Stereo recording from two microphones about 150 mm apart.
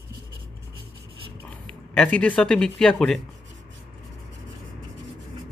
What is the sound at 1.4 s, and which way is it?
Speech, 10° left (ahead or behind).